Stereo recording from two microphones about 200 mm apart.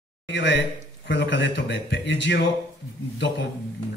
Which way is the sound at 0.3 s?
65° left (ahead or behind).